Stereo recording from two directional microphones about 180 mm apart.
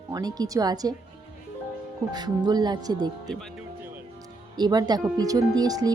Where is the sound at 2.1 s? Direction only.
20° right (ahead or behind).